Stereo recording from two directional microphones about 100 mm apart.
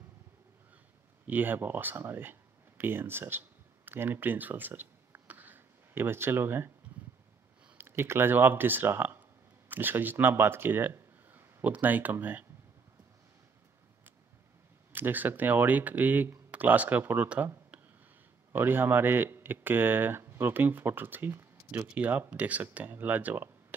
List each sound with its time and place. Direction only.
1.2 s speech: 20° right (ahead or behind)
7.7 s speech: 25° right (ahead or behind)
14.9 s speech: 20° right (ahead or behind)
18.5 s speech: 20° right (ahead or behind)